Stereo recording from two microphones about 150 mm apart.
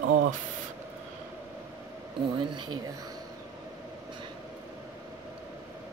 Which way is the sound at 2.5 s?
25° right (ahead or behind).